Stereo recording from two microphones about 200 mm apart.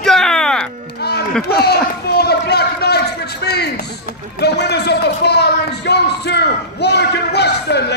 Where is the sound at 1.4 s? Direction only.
55° left (ahead or behind).